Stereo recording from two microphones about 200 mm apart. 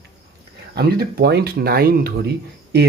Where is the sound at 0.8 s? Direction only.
50° right (ahead or behind).